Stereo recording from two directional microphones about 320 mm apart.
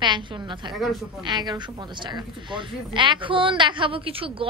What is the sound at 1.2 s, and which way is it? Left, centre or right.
A woman's voice, centre.